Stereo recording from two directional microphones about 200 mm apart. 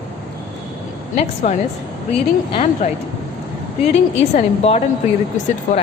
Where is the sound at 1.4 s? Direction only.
40° left (ahead or behind).